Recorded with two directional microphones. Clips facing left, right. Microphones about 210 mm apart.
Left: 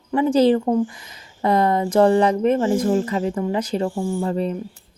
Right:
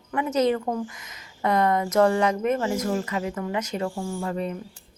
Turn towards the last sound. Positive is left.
turn(degrees=20)  # may be behind; listen again after turning